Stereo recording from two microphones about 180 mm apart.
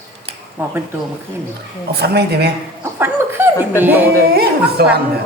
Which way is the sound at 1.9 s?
65° right (ahead or behind).